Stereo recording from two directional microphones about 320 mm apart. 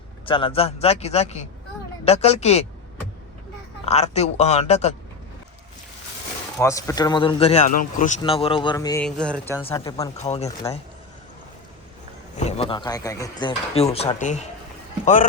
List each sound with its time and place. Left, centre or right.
0.3 s a man's voice: centre
3.8 s a man's voice: centre
6.6 s speech: centre
12.4 s a man's voice: centre